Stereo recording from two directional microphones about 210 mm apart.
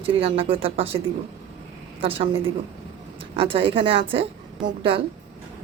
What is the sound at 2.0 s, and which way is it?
A woman's voice, 25° right (ahead or behind).